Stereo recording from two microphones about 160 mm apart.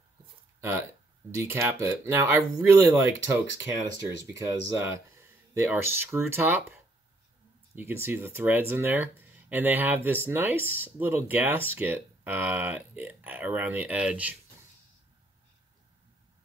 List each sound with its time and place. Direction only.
0.6 s speech: 15° right (ahead or behind)
7.7 s speech: 15° right (ahead or behind)